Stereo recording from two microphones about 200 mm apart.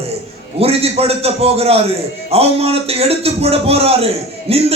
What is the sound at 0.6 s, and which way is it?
A man's voice, 30° right (ahead or behind).